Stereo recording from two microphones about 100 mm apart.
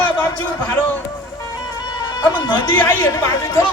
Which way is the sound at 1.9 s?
40° left (ahead or behind).